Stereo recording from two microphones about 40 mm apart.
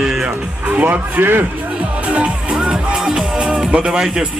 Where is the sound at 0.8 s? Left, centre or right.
Right.